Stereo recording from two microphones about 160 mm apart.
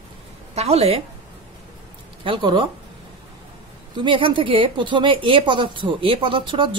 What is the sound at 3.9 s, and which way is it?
A woman's voice, 30° right (ahead or behind).